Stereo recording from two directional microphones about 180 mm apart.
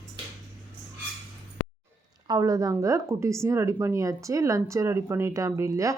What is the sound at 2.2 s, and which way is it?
Speech, 20° right (ahead or behind).